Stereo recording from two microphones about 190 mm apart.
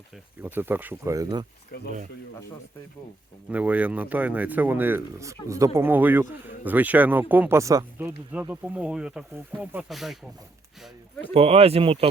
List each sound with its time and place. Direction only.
0.4 s speech: 10° right (ahead or behind)
1.7 s speech: 55° left (ahead or behind)
3.5 s speech: 10° right (ahead or behind)
11.3 s speech: 30° right (ahead or behind)